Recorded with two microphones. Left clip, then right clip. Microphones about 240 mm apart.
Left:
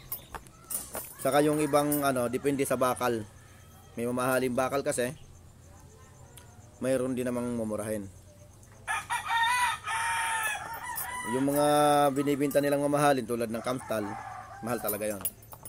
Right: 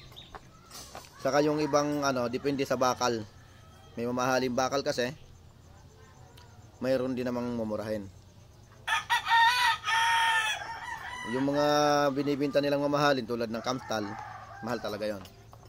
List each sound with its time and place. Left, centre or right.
1.2 s speech: centre
6.8 s speech: centre
8.8 s chicken: right
11.3 s speech: centre